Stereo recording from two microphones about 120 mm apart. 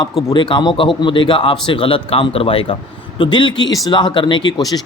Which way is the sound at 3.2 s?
40° left (ahead or behind).